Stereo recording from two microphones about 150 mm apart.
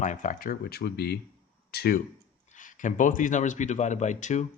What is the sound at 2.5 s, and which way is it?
Speech, 55° left (ahead or behind).